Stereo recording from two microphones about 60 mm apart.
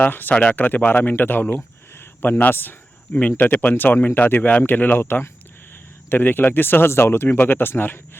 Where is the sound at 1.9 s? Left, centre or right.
Left.